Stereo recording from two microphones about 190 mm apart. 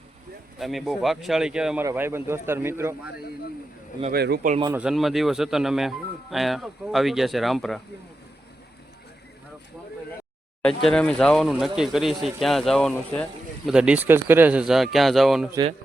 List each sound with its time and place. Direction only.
0.6 s speech: centre (ahead or behind)
4.1 s speech: 60° right (ahead or behind)
4.8 s speech: centre (ahead or behind)
10.6 s speech: 5° left (ahead or behind)